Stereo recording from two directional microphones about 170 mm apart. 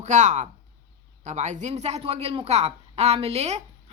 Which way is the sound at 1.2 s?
45° right (ahead or behind).